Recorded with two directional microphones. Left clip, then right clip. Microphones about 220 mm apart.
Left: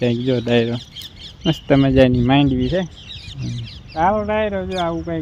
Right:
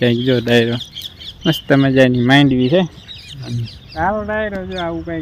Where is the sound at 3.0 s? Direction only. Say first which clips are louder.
Right 1 dB; 45° left (ahead or behind).